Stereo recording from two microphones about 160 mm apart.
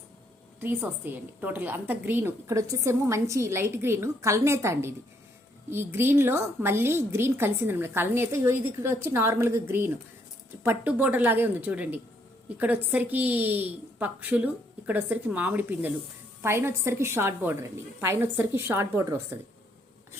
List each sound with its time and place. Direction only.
0.6 s a woman's voice: 15° right (ahead or behind)